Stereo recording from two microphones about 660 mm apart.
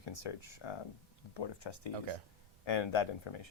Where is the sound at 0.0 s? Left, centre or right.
Left.